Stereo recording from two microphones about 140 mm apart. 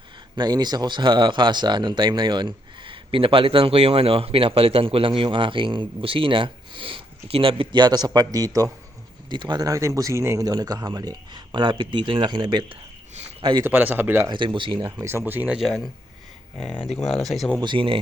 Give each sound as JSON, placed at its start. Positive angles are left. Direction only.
{"t": 0.3, "sound": "speech", "side_deg": -30}
{"t": 13.7, "sound": "speech", "side_deg": -15}
{"t": 14.3, "sound": "speech", "side_deg": -35}
{"t": 15.0, "sound": "speech", "side_deg": -15}
{"t": 15.6, "sound": "speech", "side_deg": 0}
{"t": 17.0, "sound": "speech", "side_deg": 0}
{"t": 17.6, "sound": "speech", "side_deg": -35}